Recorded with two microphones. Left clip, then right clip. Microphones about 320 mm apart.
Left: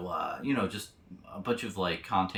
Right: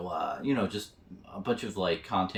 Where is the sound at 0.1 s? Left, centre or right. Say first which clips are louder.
Right 1 dB; centre.